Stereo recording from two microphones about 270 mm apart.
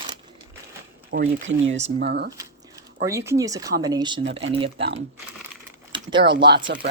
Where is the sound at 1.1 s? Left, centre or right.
Right.